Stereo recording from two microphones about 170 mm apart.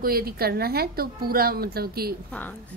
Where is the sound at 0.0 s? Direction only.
60° right (ahead or behind).